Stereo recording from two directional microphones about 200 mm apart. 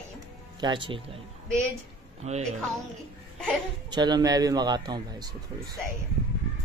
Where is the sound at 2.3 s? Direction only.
30° right (ahead or behind).